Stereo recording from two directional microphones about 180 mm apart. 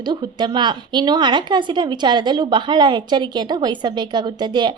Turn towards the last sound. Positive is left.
turn(degrees=-25)  # may be behind; listen again after turning